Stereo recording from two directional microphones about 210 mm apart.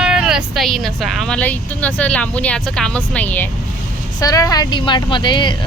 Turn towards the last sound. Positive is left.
turn(degrees=20)  # may be behind; listen again after turning